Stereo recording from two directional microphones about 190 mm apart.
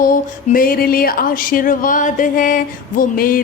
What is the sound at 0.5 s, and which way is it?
Music, 50° left (ahead or behind).